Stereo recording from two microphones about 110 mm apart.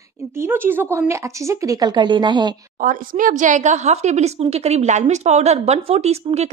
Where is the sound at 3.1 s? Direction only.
70° right (ahead or behind).